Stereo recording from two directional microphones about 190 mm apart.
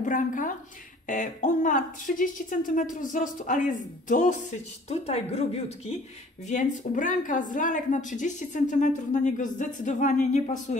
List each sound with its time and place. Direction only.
0.0 s a woman's voice: 45° left (ahead or behind)